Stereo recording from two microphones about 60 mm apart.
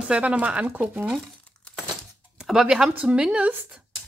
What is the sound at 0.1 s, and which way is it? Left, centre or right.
Speech, centre.